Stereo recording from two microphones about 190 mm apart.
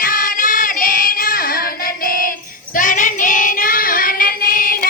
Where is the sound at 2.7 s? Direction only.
45° left (ahead or behind).